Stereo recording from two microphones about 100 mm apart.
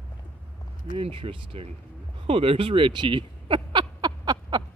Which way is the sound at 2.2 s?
70° right (ahead or behind).